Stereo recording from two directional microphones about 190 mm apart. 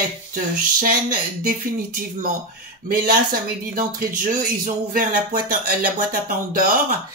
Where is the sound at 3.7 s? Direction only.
45° right (ahead or behind).